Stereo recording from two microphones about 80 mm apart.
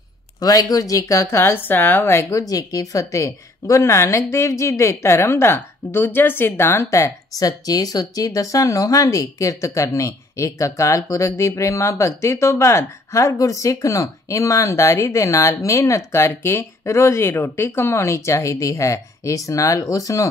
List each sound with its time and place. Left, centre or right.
0.4 s a woman's voice: left
2.3 s a woman's voice: left